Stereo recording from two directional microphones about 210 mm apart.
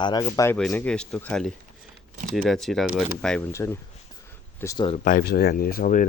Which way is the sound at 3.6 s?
15° left (ahead or behind).